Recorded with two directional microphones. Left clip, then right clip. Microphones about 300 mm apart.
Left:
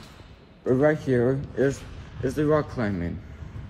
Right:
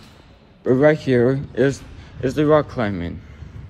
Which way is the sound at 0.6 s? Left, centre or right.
Right.